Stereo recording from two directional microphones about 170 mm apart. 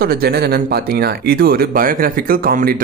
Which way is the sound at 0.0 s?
65° right (ahead or behind).